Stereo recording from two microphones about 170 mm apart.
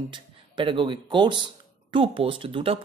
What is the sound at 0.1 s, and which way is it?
Speech, 30° right (ahead or behind).